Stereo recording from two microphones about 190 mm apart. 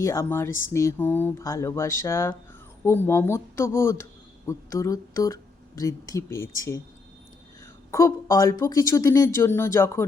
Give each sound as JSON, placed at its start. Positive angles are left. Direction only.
{"t": 0.0, "sound": "speech", "side_deg": 15}
{"t": 7.9, "sound": "speech", "side_deg": 15}